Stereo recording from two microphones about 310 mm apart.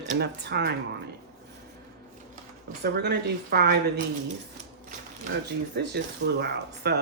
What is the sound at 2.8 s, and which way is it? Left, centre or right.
Speech, right.